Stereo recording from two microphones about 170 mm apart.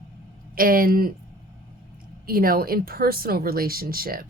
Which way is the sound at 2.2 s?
60° right (ahead or behind).